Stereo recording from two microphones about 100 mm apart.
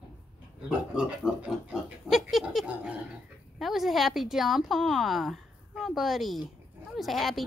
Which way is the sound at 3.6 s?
Centre (ahead or behind).